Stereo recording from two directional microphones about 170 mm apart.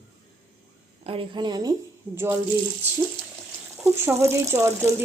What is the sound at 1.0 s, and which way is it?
A woman's voice, 30° right (ahead or behind).